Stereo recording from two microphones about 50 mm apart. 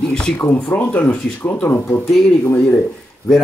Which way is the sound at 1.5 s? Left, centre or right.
Left.